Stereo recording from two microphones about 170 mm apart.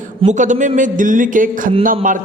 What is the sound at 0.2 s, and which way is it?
Speech, 45° right (ahead or behind).